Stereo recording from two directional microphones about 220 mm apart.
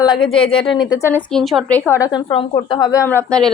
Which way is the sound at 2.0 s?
20° left (ahead or behind).